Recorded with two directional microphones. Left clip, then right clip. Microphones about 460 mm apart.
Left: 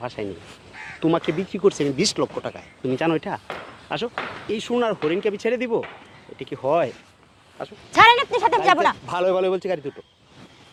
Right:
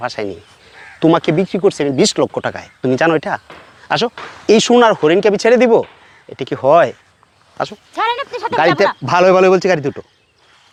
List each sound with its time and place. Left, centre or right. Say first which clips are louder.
0.2 s speech: right 8 dB; right
3.8 s speech: right 10 dB; right
8.1 s a sound: even; left
9.0 s speech: right 11 dB; right